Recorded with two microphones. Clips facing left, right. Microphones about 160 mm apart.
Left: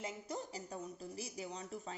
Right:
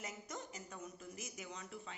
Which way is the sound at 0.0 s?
30° left (ahead or behind).